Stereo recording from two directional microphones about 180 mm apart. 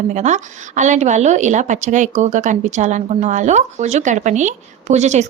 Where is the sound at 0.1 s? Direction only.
40° right (ahead or behind).